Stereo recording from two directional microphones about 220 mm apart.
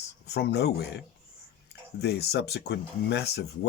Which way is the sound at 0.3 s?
50° left (ahead or behind).